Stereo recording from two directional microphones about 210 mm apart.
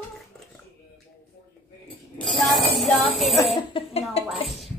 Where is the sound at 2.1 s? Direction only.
5° left (ahead or behind).